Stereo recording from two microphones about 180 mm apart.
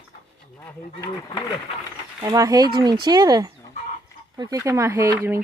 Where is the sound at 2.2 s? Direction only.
20° right (ahead or behind).